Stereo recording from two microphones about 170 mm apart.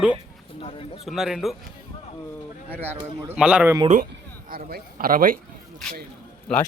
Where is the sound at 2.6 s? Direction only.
10° right (ahead or behind).